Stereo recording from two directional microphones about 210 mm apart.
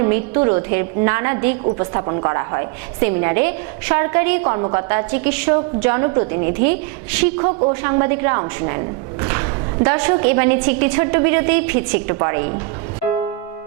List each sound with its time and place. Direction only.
0.0 s a woman's voice: 20° right (ahead or behind)
6.4 s a woman's voice: 50° right (ahead or behind)
7.3 s a woman's voice: 25° right (ahead or behind)